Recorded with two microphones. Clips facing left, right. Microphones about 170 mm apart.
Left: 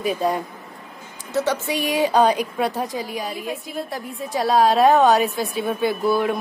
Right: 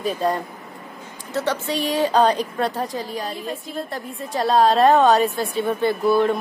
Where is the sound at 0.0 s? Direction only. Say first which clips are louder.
Even; 10° left (ahead or behind).